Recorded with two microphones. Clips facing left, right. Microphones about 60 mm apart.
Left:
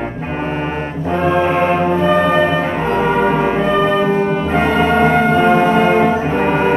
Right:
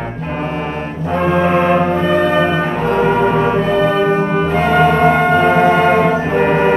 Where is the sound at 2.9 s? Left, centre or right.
Centre.